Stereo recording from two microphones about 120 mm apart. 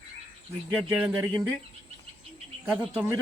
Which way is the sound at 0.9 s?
10° right (ahead or behind).